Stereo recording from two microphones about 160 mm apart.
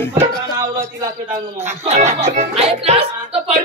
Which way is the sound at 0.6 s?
20° right (ahead or behind).